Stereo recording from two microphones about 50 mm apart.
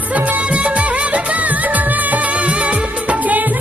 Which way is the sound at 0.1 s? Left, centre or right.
Right.